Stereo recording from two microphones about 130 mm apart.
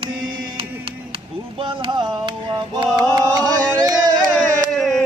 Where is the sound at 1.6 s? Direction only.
40° right (ahead or behind).